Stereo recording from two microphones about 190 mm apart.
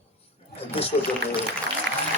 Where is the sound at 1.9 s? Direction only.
70° right (ahead or behind).